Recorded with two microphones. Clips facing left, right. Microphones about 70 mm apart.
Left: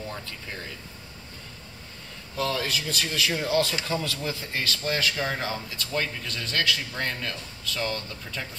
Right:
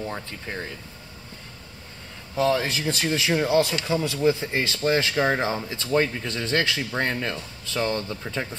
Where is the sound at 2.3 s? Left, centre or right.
Right.